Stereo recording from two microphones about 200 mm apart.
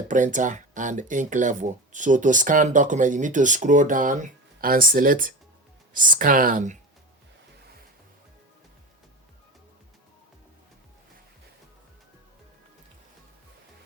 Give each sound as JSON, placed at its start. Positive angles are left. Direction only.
{"t": 0.1, "sound": "speech", "side_deg": -40}